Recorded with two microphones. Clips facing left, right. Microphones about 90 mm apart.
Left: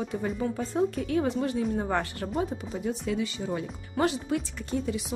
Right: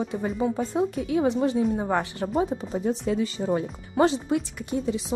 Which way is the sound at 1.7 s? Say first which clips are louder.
Right 3 dB; 10° right (ahead or behind).